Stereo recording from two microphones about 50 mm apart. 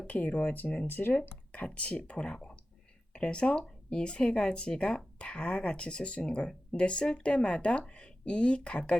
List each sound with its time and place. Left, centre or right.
0.1 s speech: left
1.5 s speech: left